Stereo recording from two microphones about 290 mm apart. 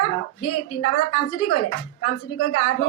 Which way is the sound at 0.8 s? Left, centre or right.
Left.